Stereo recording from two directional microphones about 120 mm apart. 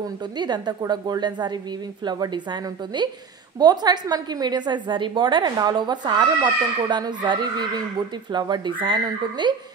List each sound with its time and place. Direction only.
0.0 s a woman's voice: 35° right (ahead or behind)